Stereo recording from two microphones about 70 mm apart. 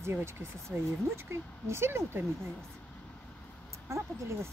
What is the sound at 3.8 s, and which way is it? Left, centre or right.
Speech, right.